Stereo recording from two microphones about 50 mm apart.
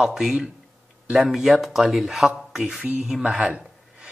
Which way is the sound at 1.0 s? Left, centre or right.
Right.